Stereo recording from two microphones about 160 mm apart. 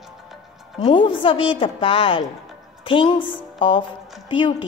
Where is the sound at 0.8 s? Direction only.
30° left (ahead or behind).